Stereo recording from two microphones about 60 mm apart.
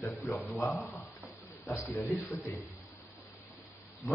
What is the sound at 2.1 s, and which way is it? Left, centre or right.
Speech, left.